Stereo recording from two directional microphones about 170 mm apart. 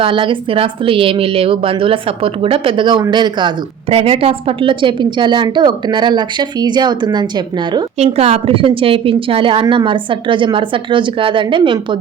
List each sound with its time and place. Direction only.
0.0 s a woman's voice: 30° right (ahead or behind)
7.9 s a woman's voice: 40° right (ahead or behind)